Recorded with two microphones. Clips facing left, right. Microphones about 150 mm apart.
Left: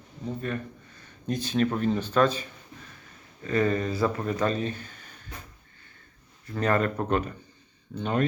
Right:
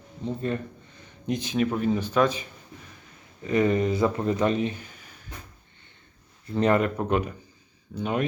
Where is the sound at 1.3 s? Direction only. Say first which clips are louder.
Even; 15° right (ahead or behind).